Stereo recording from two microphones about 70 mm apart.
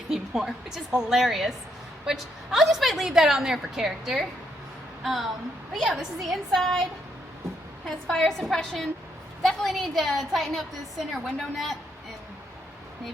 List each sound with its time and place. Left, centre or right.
0.1 s a woman's voice: centre
7.9 s a woman's voice: centre